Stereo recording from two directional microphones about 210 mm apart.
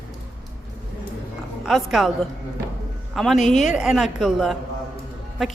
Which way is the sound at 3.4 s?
35° left (ahead or behind).